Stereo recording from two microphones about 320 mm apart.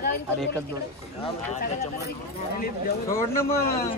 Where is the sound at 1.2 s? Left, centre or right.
Centre.